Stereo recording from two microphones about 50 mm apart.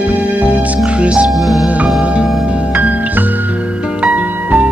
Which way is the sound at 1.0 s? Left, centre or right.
Right.